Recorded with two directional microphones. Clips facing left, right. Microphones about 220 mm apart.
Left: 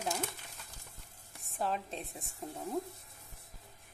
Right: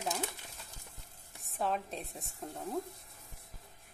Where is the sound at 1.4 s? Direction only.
Centre (ahead or behind).